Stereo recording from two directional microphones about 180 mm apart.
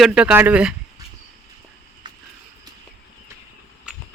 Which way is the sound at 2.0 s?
25° right (ahead or behind).